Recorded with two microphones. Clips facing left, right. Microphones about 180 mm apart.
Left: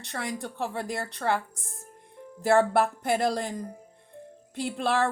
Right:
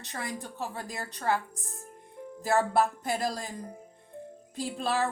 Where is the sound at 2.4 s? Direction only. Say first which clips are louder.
Left 4 dB; 65° left (ahead or behind).